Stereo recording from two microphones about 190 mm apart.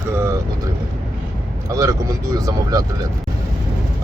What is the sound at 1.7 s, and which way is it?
Speech, 15° right (ahead or behind).